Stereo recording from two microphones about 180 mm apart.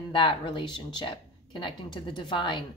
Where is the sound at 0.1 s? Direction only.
30° left (ahead or behind).